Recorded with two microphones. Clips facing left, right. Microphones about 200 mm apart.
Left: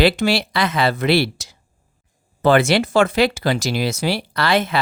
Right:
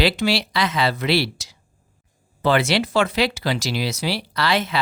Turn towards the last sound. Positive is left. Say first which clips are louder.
# left 3 dB
turn(degrees=50)  # may be behind; listen again after turning